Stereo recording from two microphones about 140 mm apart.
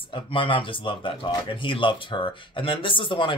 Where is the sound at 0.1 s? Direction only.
35° left (ahead or behind).